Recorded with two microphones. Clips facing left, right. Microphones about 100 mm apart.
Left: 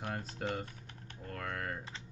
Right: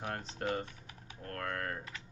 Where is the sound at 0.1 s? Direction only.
5° left (ahead or behind).